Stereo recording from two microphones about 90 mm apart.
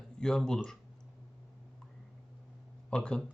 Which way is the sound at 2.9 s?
10° left (ahead or behind).